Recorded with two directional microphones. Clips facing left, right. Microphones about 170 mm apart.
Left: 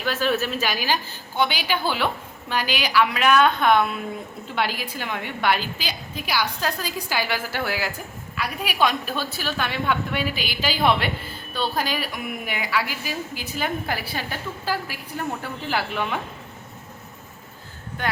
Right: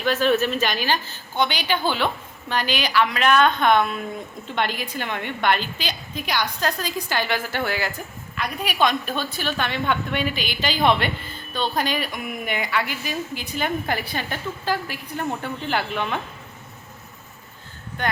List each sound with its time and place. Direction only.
0.0 s a woman's voice: 5° left (ahead or behind)
18.0 s a woman's voice: 5° left (ahead or behind)